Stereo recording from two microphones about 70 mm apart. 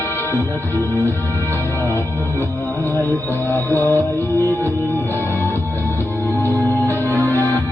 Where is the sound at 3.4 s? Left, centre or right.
Left.